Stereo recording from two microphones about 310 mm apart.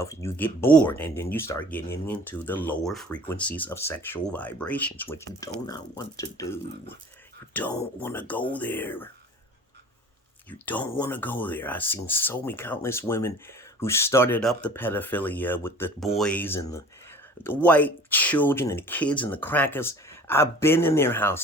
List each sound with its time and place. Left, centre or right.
0.0 s speech: centre
8.5 s speech: centre
10.7 s speech: centre